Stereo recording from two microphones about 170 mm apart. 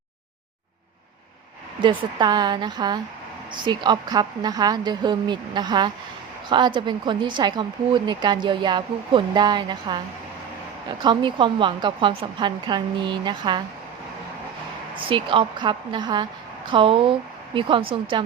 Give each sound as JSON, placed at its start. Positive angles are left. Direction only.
{"t": 1.8, "sound": "speech", "side_deg": -30}
{"t": 15.1, "sound": "speech", "side_deg": -30}